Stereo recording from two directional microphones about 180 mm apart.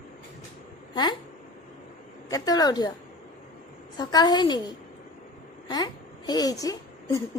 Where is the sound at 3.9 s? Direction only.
20° left (ahead or behind).